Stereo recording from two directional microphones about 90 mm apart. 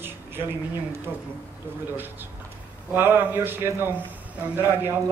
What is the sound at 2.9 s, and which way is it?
A man's voice, 25° right (ahead or behind).